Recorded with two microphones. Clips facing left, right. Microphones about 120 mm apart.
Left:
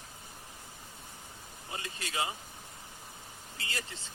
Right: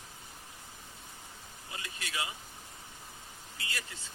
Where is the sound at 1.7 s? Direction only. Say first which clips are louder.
Left 3 dB; 35° left (ahead or behind).